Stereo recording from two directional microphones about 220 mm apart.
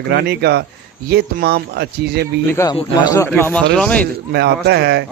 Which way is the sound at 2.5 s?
15° left (ahead or behind).